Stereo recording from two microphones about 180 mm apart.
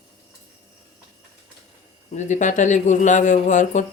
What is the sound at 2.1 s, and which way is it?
Speech, 40° left (ahead or behind).